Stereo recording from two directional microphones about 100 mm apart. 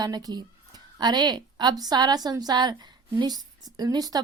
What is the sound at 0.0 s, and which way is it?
A woman's voice, 40° right (ahead or behind).